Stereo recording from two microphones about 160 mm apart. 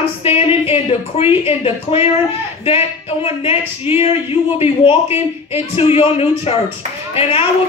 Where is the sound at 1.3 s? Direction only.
40° left (ahead or behind).